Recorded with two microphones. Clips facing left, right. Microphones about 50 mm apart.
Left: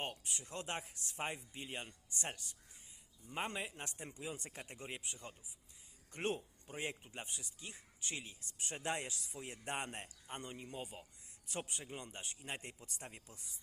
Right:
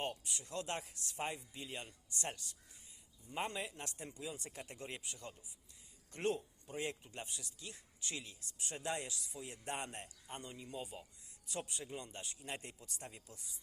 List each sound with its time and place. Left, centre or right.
0.0 s speech: left
8.5 s speech: left